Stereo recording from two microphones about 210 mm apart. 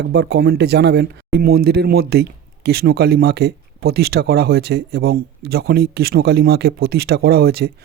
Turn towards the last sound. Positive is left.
turn(degrees=-50)  # may be behind; listen again after turning